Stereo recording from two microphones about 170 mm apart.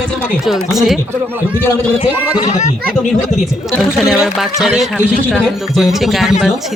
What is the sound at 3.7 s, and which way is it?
Speech, centre (ahead or behind).